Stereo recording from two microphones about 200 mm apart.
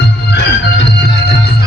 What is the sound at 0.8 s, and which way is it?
Music, 55° left (ahead or behind).